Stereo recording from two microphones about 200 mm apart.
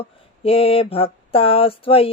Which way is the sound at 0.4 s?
30° left (ahead or behind).